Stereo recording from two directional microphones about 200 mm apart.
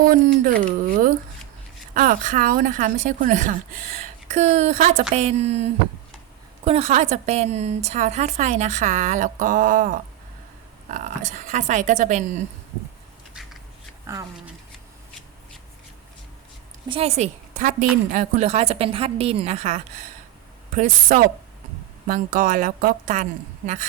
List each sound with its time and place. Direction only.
0.0 s a woman's voice: 45° right (ahead or behind)
14.1 s speech: 15° right (ahead or behind)
16.9 s a woman's voice: 30° right (ahead or behind)